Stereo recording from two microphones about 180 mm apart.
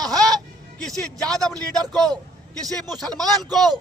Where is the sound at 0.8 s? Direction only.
Centre (ahead or behind).